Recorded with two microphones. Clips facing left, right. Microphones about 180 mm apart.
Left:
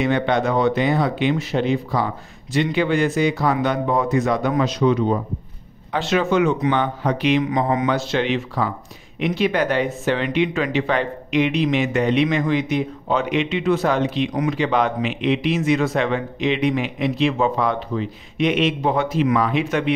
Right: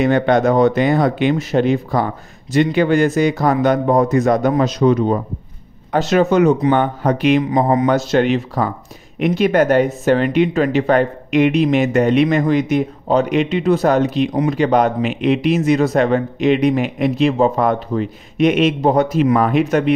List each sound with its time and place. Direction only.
0.0 s speech: 45° right (ahead or behind)
14.3 s speech: 30° right (ahead or behind)
14.6 s speech: 45° right (ahead or behind)